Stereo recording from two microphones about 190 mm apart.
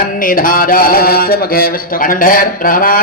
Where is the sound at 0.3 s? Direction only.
45° left (ahead or behind).